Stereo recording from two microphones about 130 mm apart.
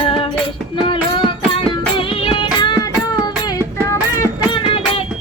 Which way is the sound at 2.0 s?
40° left (ahead or behind).